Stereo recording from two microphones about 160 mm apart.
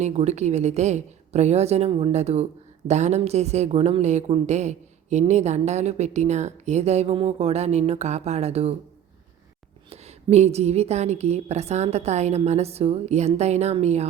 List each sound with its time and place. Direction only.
0.0 s a woman's voice: 45° right (ahead or behind)
9.9 s a woman's voice: 40° right (ahead or behind)